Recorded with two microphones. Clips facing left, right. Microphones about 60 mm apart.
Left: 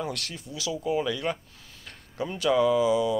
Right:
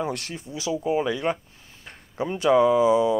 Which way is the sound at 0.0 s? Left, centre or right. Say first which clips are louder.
Right 4 dB; right.